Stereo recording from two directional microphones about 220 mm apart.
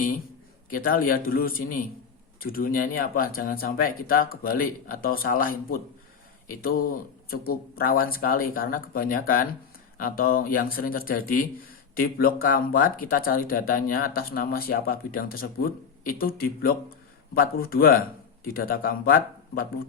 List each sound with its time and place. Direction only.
0.7 s a man's voice: 40° left (ahead or behind)